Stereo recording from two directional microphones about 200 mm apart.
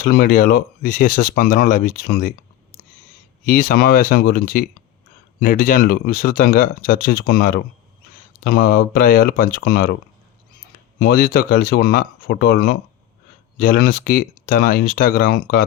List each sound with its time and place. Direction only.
0.0 s speech: 45° left (ahead or behind)
3.4 s speech: 45° left (ahead or behind)
11.0 s speech: 50° left (ahead or behind)